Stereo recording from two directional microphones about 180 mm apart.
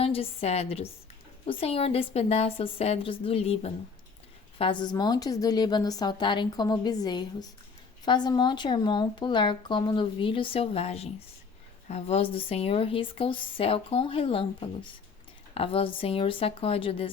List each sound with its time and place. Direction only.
0.0 s speech: 30° left (ahead or behind)